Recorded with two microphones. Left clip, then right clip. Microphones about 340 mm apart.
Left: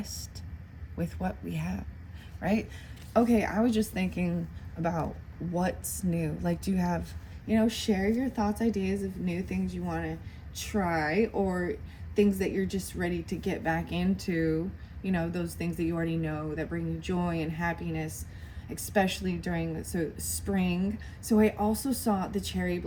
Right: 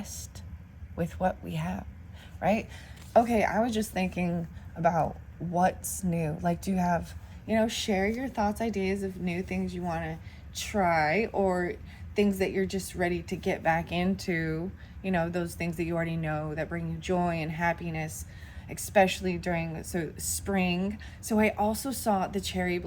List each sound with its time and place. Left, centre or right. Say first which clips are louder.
0.9 s a woman's voice: right 6 dB; centre